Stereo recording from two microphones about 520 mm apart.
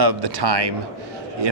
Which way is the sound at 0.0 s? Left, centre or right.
Right.